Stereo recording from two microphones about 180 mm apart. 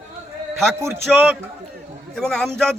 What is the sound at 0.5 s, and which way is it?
A man's voice, centre (ahead or behind).